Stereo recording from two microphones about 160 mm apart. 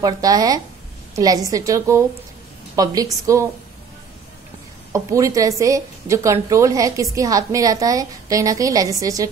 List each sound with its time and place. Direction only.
0.0 s a woman's voice: 25° right (ahead or behind)
4.9 s a woman's voice: 20° right (ahead or behind)